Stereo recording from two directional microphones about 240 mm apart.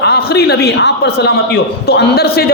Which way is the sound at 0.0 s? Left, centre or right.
Left.